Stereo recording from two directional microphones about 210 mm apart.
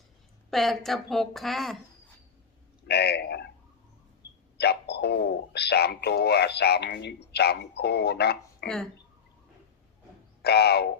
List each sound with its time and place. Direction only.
0.5 s a woman's voice: centre (ahead or behind)
2.8 s speech: 50° left (ahead or behind)
4.5 s speech: 50° left (ahead or behind)
8.6 s a woman's voice: 5° left (ahead or behind)
10.4 s speech: 50° left (ahead or behind)